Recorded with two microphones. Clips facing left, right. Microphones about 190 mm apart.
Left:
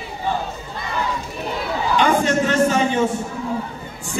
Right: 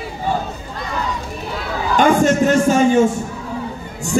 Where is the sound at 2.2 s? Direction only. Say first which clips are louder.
Right 4 dB; 45° right (ahead or behind).